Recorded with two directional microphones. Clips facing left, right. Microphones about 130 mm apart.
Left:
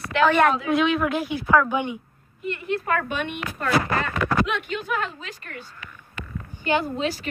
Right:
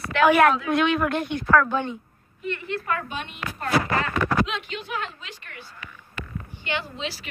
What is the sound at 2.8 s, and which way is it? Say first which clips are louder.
Speech: left 5 dB; 55° left (ahead or behind).